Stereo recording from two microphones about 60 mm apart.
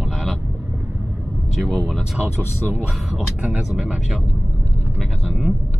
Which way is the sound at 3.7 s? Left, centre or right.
Centre.